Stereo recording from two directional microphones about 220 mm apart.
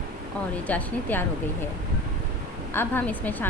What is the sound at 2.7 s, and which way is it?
Speech, 10° left (ahead or behind).